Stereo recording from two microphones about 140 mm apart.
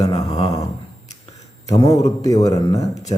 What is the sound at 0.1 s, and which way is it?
Speech, 50° left (ahead or behind).